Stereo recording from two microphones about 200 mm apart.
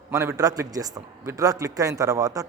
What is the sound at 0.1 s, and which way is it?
A man's voice, 15° right (ahead or behind).